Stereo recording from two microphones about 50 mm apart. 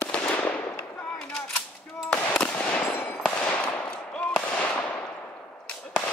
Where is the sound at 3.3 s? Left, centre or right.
Left.